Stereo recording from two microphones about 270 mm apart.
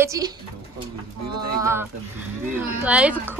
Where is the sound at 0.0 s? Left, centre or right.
Centre.